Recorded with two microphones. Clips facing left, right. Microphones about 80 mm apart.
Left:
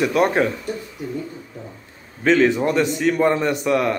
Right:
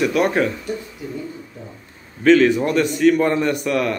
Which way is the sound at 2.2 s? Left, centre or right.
Centre.